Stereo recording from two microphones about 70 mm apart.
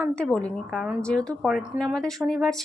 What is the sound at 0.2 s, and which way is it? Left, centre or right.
Speech, centre.